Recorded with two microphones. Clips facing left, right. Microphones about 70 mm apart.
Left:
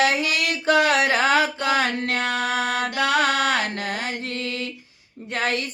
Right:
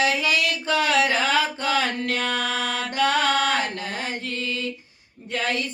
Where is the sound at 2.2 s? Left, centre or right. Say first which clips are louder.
Left 2 dB; left.